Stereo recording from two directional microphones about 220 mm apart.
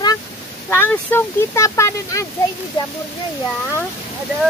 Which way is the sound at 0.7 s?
10° left (ahead or behind).